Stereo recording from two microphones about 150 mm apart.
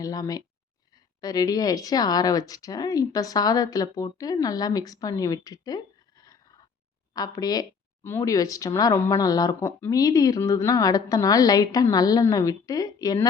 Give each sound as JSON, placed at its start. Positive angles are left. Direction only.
{"t": 0.0, "sound": "speech", "side_deg": 25}